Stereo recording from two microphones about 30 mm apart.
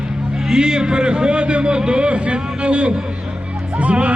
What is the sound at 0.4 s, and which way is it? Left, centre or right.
A man's voice, right.